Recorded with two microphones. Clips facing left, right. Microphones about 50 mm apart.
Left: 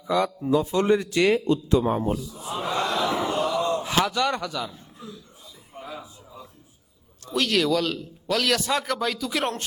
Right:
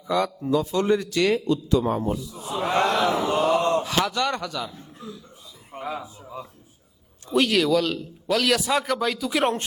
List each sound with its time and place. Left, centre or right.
0.1 s speech: centre
0.5 s a man's voice: left
2.5 s speech: right
3.2 s mantra: right
3.8 s speech: centre
5.7 s a sound: right
7.3 s speech: centre